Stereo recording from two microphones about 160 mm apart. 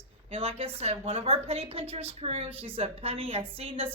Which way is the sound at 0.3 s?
40° right (ahead or behind).